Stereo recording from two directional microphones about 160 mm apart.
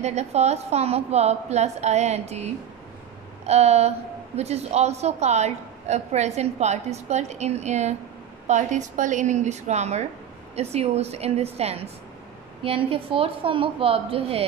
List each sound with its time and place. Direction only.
0.0 s a woman's voice: 45° right (ahead or behind)